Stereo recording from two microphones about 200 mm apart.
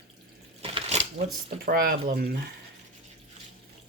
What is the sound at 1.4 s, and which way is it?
Speech, 50° right (ahead or behind).